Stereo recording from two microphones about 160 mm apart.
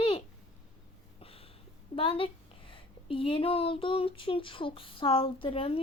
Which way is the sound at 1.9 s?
35° left (ahead or behind).